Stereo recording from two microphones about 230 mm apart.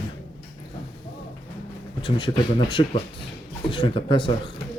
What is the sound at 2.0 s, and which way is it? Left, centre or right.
Speech, left.